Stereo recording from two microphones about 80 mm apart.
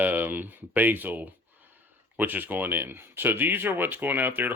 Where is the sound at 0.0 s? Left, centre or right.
Right.